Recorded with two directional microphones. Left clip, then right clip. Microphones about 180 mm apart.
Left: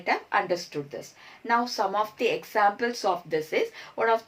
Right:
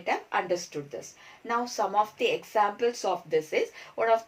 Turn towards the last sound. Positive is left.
turn(degrees=30)  # may be behind; listen again after turning